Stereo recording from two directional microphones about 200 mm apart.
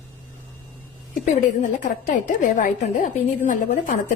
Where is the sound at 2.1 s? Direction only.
35° left (ahead or behind).